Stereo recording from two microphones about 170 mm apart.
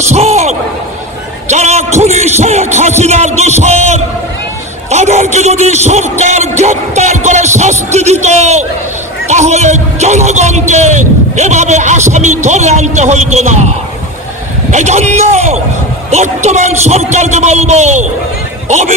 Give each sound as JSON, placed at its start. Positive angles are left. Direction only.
{"t": 0.1, "sound": "a sound", "side_deg": -40}
{"t": 1.5, "sound": "a man's voice", "side_deg": -40}
{"t": 14.7, "sound": "a man's voice", "side_deg": -40}